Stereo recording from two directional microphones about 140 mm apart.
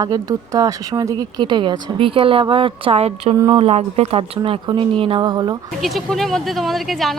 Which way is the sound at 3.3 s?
25° right (ahead or behind).